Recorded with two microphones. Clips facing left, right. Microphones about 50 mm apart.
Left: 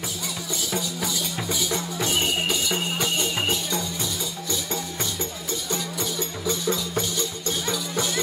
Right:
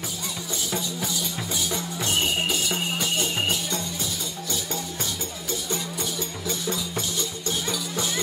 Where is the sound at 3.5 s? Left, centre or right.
Left.